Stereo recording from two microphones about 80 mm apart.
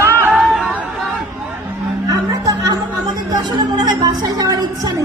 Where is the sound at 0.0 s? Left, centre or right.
Right.